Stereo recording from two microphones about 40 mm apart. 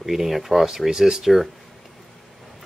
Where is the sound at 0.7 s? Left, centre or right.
Centre.